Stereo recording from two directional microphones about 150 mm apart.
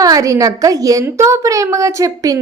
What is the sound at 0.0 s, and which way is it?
A woman's voice, 20° right (ahead or behind).